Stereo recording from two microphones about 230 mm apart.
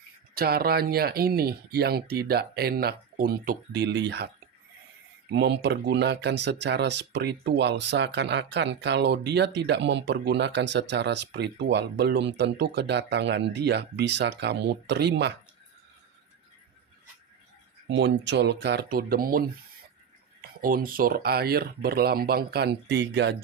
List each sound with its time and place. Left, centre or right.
0.3 s speech: right
5.3 s speech: right
17.8 s speech: right
20.6 s speech: right